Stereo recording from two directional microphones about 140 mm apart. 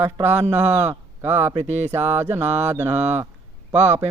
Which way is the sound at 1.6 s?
50° right (ahead or behind).